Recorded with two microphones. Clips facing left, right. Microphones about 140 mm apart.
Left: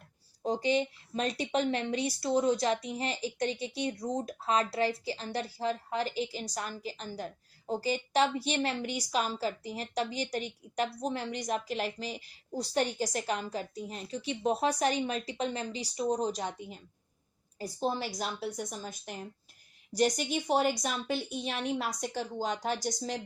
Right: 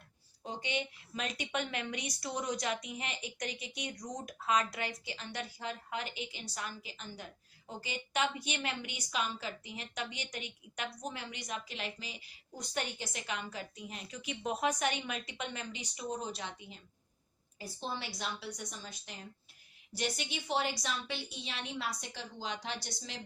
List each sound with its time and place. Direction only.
0.4 s a woman's voice: 35° left (ahead or behind)